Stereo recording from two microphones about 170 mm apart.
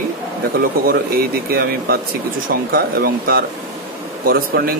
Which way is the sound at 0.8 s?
60° right (ahead or behind).